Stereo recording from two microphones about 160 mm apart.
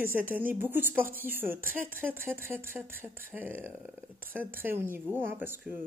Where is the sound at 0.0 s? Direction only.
10° right (ahead or behind).